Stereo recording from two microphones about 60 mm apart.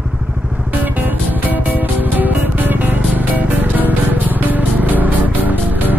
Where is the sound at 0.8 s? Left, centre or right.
Right.